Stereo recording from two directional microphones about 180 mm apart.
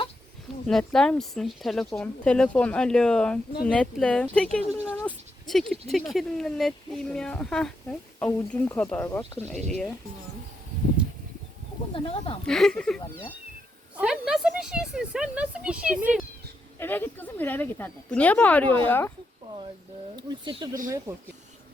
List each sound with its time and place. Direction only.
0.7 s speech: 5° left (ahead or behind)
11.9 s speech: 30° left (ahead or behind)
12.5 s speech: 5° left (ahead or behind)
16.8 s speech: 10° left (ahead or behind)
20.1 s speech: 25° right (ahead or behind)